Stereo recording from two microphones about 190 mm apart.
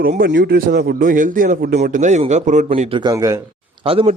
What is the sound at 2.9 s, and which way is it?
Speech, 20° right (ahead or behind).